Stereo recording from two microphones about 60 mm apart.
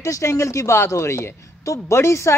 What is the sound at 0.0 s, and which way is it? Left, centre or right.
A woman's voice, left.